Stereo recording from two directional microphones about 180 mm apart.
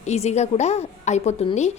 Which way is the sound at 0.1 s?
40° left (ahead or behind).